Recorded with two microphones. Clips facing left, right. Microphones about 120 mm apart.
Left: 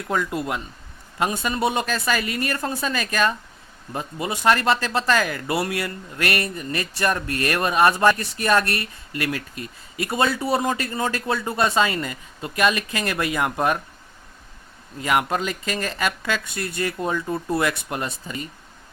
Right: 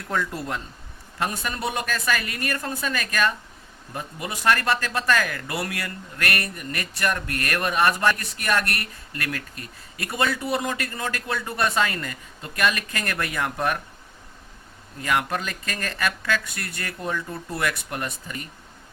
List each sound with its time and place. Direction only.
0.1 s speech: 10° left (ahead or behind)
1.2 s speech: 20° left (ahead or behind)
15.0 s speech: 20° left (ahead or behind)